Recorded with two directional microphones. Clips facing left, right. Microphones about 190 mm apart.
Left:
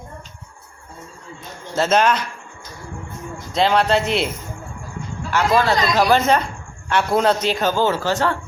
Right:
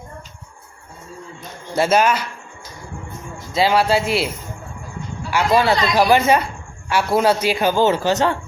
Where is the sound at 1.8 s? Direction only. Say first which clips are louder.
Right 1 dB; 10° right (ahead or behind).